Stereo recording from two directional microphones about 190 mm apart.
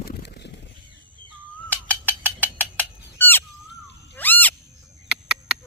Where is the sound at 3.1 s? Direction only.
10° left (ahead or behind).